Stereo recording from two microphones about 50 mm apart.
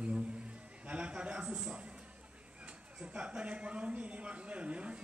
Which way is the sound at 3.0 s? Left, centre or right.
Centre.